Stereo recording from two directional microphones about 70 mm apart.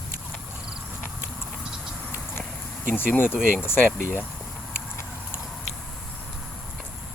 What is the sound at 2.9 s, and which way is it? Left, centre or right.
Speech, left.